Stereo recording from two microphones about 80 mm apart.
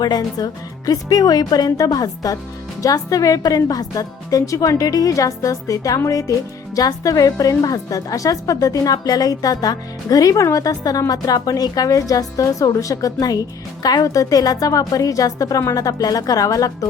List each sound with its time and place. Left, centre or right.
0.0 s a woman's voice: left